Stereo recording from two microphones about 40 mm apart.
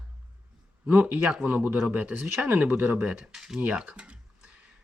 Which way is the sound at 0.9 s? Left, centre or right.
Right.